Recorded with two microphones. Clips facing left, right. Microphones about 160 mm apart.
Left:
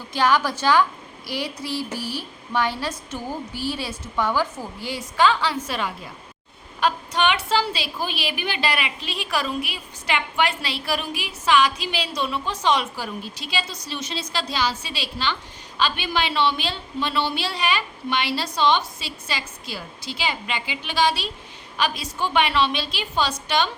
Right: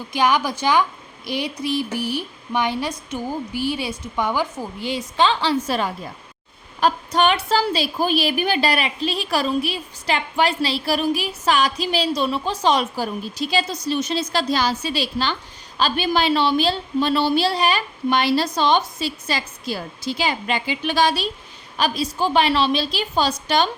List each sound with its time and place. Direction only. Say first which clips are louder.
0.1 s a woman's voice: right 1 dB; 15° right (ahead or behind); by 23.6 s 40° right (ahead or behind)